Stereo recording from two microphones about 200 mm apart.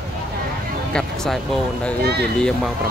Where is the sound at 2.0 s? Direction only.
55° right (ahead or behind).